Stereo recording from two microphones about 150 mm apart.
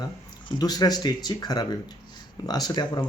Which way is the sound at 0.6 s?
25° left (ahead or behind).